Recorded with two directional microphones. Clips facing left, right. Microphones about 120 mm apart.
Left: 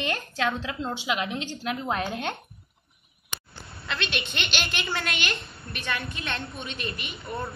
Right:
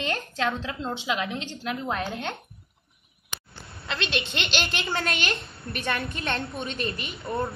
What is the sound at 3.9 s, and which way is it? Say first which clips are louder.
A woman's voice: right 2 dB; 25° right (ahead or behind).